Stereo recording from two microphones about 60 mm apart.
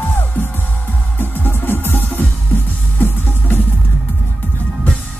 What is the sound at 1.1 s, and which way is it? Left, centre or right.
Music, left.